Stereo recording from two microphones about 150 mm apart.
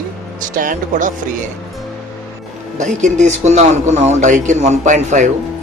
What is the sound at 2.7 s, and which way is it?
A man's voice, 55° right (ahead or behind).